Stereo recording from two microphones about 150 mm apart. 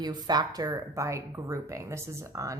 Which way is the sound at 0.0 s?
25° right (ahead or behind).